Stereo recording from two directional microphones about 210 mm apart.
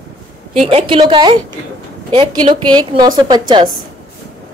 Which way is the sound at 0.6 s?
30° right (ahead or behind).